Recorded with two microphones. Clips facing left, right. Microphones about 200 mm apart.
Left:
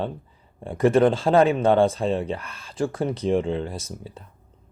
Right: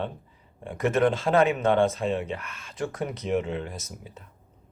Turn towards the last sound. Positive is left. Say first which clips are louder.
# left 5 dB
turn(degrees=30)  # may be behind; listen again after turning